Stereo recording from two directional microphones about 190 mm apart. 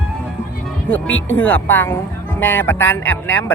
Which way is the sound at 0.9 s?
10° left (ahead or behind).